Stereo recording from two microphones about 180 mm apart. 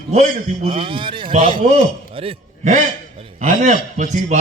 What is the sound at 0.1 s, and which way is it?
A man's voice, 40° right (ahead or behind).